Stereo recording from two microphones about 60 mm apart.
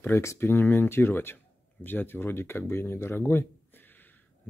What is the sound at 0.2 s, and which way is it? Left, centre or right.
Speech, left.